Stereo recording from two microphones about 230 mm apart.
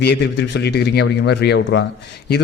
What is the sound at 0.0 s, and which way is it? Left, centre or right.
A man's voice, left.